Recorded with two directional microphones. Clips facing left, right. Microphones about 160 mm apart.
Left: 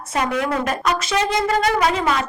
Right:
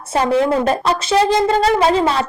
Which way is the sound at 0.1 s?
30° right (ahead or behind).